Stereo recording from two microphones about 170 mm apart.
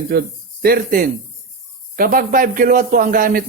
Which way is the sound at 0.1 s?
65° right (ahead or behind).